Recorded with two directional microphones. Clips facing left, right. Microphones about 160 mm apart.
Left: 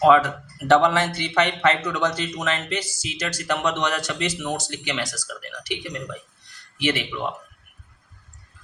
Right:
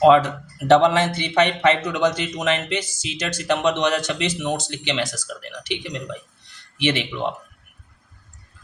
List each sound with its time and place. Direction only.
0.0 s speech: 20° right (ahead or behind)